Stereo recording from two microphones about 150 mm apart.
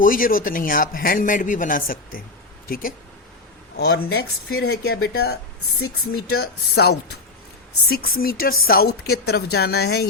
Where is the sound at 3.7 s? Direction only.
90° left.